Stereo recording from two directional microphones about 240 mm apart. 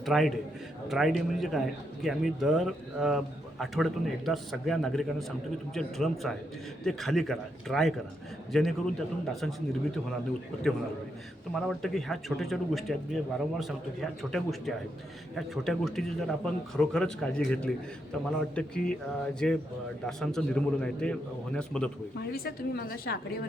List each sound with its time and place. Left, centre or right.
0.0 s a man's voice: centre
11.7 s speech: centre
22.2 s a woman's voice: left